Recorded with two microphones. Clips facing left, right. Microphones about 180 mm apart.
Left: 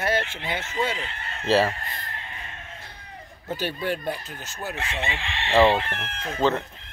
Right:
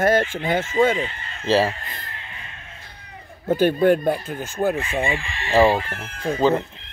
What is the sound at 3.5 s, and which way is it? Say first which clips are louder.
Speech: right 12 dB; 50° right (ahead or behind).